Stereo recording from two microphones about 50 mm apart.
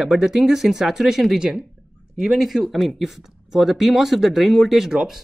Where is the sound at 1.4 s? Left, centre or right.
Centre.